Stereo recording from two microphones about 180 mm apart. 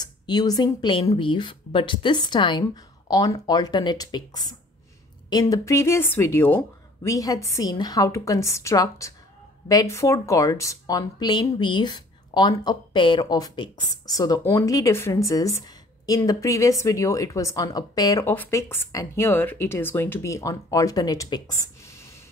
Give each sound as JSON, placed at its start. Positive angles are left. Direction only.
{"t": 0.0, "sound": "speech", "side_deg": 20}